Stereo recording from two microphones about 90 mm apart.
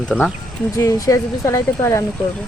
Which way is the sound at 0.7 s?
40° left (ahead or behind).